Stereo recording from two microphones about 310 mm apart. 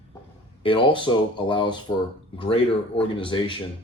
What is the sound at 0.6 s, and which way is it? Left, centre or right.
Speech, centre.